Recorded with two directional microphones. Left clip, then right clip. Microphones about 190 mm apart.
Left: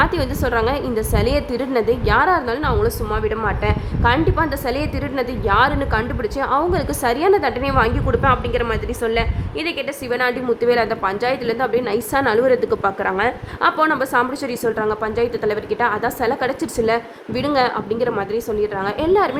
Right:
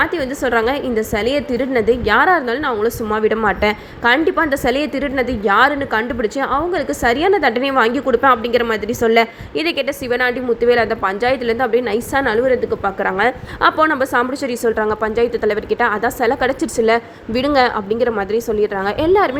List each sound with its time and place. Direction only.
0.0 s a woman's voice: 5° right (ahead or behind); by 9.8 s 25° right (ahead or behind)
10.1 s a woman's voice: 10° right (ahead or behind)
13.0 s a woman's voice: 15° right (ahead or behind)